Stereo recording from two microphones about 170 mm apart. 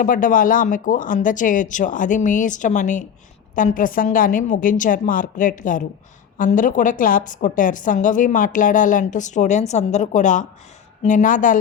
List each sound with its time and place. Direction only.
0.0 s a woman's voice: 55° left (ahead or behind)